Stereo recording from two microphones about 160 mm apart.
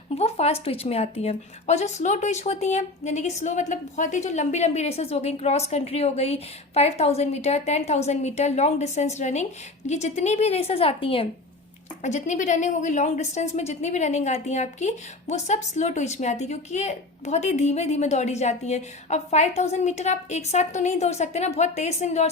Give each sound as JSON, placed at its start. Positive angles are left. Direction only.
{"t": 0.2, "sound": "speech", "side_deg": 40}
{"t": 12.0, "sound": "speech", "side_deg": 50}